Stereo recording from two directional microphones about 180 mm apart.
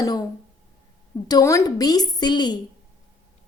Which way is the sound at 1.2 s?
20° left (ahead or behind).